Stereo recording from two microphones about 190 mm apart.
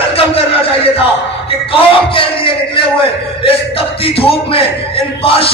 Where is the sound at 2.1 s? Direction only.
30° left (ahead or behind).